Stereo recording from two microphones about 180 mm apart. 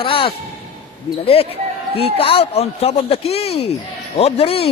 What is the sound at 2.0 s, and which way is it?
Speech, 30° left (ahead or behind).